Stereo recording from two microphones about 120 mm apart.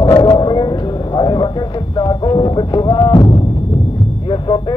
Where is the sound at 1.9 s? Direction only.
40° left (ahead or behind).